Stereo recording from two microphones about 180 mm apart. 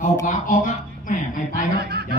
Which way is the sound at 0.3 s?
45° left (ahead or behind).